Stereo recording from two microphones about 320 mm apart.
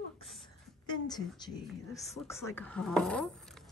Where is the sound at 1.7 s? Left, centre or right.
Centre.